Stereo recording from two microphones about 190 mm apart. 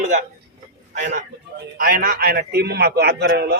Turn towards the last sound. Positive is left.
turn(degrees=-60)  # may be behind; listen again after turning